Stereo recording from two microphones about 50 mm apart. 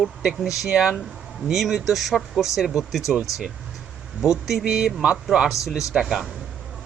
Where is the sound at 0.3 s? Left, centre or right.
Centre.